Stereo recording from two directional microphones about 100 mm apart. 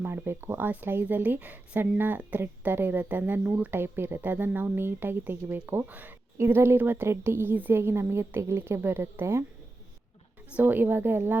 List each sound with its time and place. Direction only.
0.0 s speech: 25° right (ahead or behind)
10.6 s speech: 20° right (ahead or behind)